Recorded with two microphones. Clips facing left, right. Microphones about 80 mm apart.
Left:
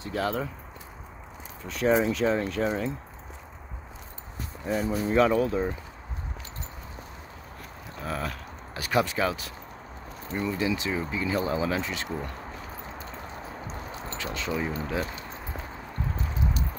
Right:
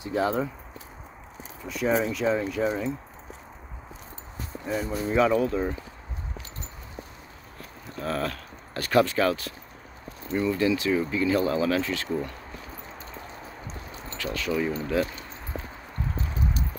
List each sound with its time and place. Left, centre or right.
0.0 s speech: right
1.7 s speech: centre
4.6 s speech: centre
8.0 s speech: centre
14.1 s speech: left